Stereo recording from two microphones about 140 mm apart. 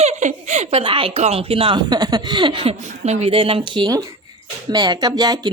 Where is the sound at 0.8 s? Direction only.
40° right (ahead or behind).